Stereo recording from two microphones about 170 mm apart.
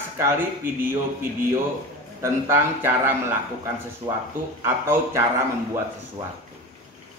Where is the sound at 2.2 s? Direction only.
15° right (ahead or behind).